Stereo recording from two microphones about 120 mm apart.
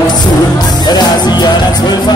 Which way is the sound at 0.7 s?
35° left (ahead or behind).